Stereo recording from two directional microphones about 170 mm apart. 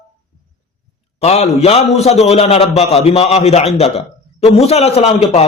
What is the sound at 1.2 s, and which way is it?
A man's voice, 40° left (ahead or behind).